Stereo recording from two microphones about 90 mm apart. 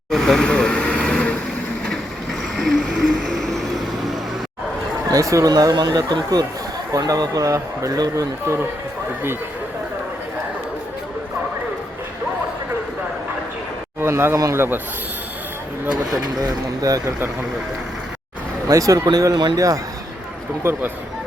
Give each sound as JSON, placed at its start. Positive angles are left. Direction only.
{"t": 0.1, "sound": "vehicle", "side_deg": 0}
{"t": 2.6, "sound": "vehicle", "side_deg": 0}
{"t": 5.1, "sound": "a man's voice", "side_deg": -35}
{"t": 14.0, "sound": "a man's voice", "side_deg": -25}
{"t": 16.4, "sound": "a man's voice", "side_deg": -40}
{"t": 18.7, "sound": "a man's voice", "side_deg": -40}
{"t": 20.7, "sound": "a man's voice", "side_deg": -25}